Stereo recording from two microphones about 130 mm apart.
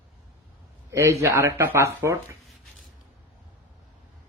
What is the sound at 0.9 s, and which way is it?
Speech, 20° right (ahead or behind).